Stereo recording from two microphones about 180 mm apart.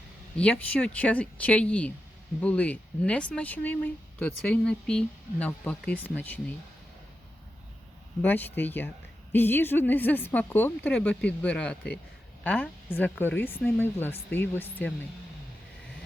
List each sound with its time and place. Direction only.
0.3 s speech: 5° left (ahead or behind)
8.2 s speech: 10° left (ahead or behind)